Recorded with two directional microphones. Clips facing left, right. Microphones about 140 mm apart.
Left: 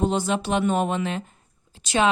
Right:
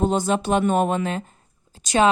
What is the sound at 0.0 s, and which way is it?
Speech, 45° right (ahead or behind).